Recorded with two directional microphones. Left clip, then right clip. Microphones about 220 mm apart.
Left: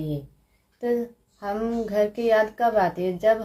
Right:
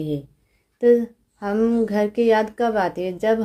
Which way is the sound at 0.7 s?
55° right (ahead or behind).